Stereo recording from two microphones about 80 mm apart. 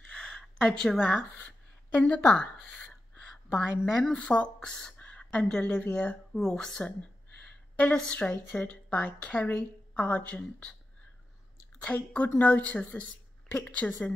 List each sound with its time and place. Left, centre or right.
0.1 s speech: centre
3.5 s a woman's voice: centre
4.1 s a woman's voice: centre
11.8 s a woman's voice: centre